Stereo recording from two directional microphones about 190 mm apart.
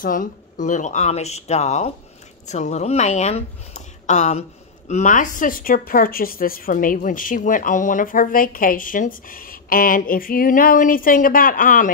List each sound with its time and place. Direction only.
0.0 s speech: 45° left (ahead or behind)